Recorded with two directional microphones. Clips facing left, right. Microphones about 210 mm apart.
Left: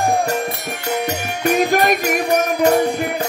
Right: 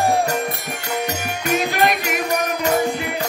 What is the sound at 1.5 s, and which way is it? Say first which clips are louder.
Music: left 4 dB; 45° left (ahead or behind).